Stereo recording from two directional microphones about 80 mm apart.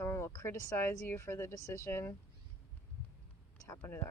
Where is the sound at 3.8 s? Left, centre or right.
Left.